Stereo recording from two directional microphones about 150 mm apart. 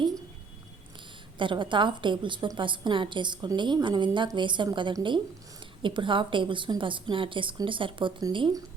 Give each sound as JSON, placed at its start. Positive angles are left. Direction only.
{"t": 1.4, "sound": "a woman's voice", "side_deg": -35}